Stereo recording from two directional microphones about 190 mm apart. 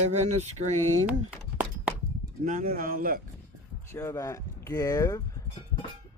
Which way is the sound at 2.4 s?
45° right (ahead or behind).